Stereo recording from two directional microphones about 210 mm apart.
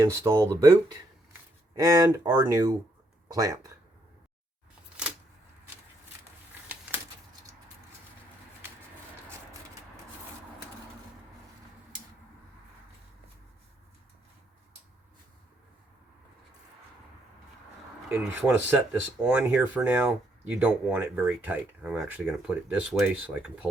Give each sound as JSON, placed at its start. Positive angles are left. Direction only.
{"t": 0.0, "sound": "speech", "side_deg": -15}
{"t": 1.7, "sound": "speech", "side_deg": -15}
{"t": 18.1, "sound": "speech", "side_deg": -10}